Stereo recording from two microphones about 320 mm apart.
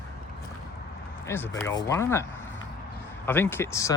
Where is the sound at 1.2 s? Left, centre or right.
Centre.